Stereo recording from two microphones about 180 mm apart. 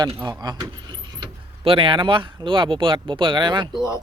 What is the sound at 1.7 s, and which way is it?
Speech, 30° right (ahead or behind).